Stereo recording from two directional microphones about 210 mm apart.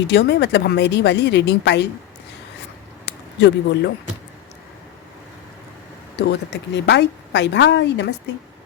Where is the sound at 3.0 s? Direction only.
55° left (ahead or behind).